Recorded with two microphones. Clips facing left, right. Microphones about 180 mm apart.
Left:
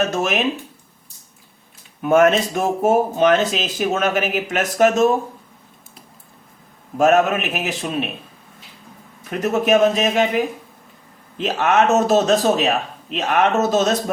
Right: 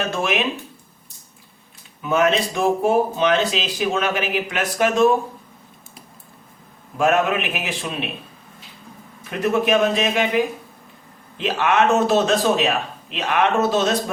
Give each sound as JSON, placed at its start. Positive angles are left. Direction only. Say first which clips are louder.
{"t": 0.1, "sound": "speech", "louder": "left 2 dB", "side_deg": 40}
{"t": 2.0, "sound": "speech", "louder": "left 4 dB", "side_deg": 50}
{"t": 6.9, "sound": "speech", "louder": "left 3 dB", "side_deg": 40}
{"t": 9.4, "sound": "speech", "louder": "left 2 dB", "side_deg": 45}
{"t": 11.3, "sound": "speech", "louder": "left 2 dB", "side_deg": 45}